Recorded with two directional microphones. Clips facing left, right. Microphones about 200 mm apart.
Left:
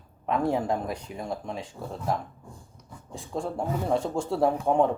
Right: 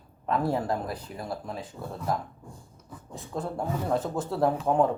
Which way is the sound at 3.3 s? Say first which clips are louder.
Left 2 dB; 5° left (ahead or behind).